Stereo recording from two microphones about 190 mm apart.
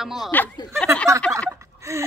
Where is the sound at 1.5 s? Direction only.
15° right (ahead or behind).